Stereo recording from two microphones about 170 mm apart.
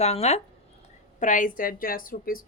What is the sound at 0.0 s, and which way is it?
A woman's voice, 40° left (ahead or behind).